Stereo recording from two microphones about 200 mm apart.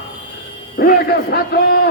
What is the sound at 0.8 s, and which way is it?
A man's voice, 50° left (ahead or behind).